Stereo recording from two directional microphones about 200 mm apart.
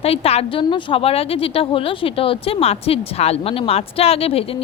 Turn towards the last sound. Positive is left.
turn(degrees=30)  # may be behind; listen again after turning